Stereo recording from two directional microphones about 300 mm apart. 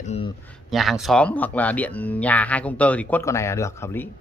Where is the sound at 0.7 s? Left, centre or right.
Centre.